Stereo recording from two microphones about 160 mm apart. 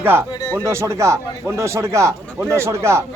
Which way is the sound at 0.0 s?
15° right (ahead or behind).